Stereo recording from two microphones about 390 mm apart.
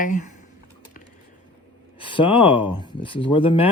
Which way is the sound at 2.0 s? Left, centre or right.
Centre.